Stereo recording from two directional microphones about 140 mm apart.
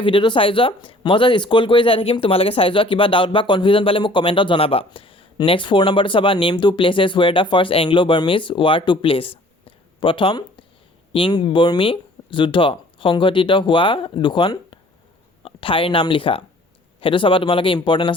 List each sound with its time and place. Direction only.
0.0 s speech: 35° left (ahead or behind)